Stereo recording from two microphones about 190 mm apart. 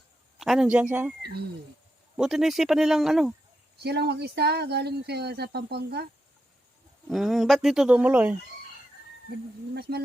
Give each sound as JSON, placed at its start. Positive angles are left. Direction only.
{"t": 0.3, "sound": "speech", "side_deg": 0}
{"t": 2.1, "sound": "speech", "side_deg": 0}
{"t": 3.8, "sound": "speech", "side_deg": -60}
{"t": 7.1, "sound": "speech", "side_deg": 0}
{"t": 9.9, "sound": "speech", "side_deg": -60}